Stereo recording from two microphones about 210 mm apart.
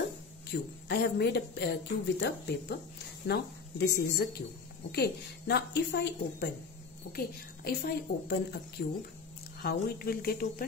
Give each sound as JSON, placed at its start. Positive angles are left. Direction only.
{"t": 0.5, "sound": "a woman's voice", "side_deg": 50}